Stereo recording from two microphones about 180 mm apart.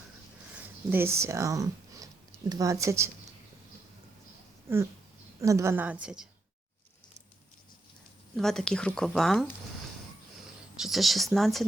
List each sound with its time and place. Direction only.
0.9 s a woman's voice: 15° right (ahead or behind)
5.4 s a woman's voice: 15° right (ahead or behind)
8.4 s speech: centre (ahead or behind)
10.8 s speech: centre (ahead or behind)